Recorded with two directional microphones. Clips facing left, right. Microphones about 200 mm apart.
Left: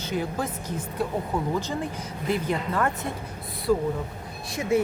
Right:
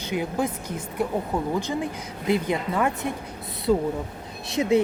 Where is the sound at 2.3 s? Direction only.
15° right (ahead or behind).